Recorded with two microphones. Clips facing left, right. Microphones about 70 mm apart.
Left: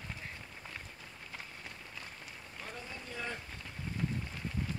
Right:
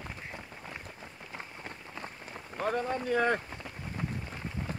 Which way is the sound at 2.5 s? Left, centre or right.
Right.